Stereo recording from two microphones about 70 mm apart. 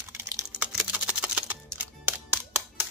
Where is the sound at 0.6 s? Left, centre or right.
Centre.